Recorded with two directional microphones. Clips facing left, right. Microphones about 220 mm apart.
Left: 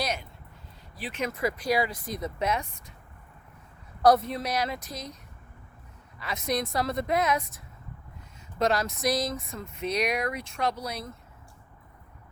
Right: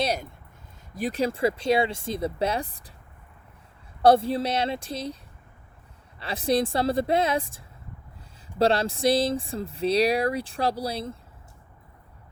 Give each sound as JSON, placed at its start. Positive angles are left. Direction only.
{"t": 0.9, "sound": "speech", "side_deg": -40}
{"t": 4.0, "sound": "speech", "side_deg": -30}
{"t": 6.1, "sound": "speech", "side_deg": -30}